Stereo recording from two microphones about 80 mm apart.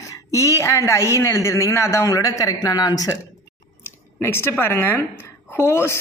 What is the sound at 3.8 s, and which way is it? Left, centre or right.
A woman's voice, left.